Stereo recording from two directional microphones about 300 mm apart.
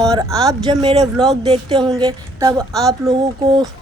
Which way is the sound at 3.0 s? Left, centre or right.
Centre.